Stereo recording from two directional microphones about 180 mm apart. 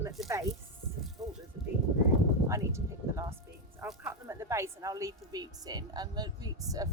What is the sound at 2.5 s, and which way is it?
A woman's voice, 15° right (ahead or behind).